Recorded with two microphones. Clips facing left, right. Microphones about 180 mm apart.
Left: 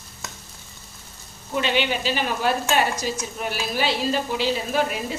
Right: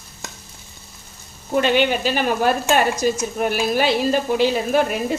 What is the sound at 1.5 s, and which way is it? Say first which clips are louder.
Speech: right 6 dB; 50° right (ahead or behind).